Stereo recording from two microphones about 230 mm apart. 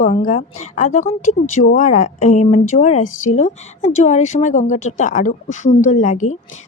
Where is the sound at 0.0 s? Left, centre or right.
Left.